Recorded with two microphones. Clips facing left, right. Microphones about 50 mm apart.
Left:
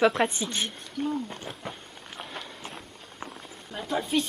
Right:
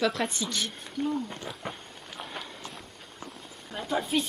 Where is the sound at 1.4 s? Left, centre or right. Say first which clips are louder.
Even; centre.